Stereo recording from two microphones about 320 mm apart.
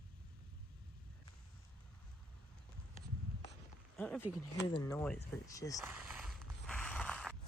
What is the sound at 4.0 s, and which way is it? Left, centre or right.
Speech, centre.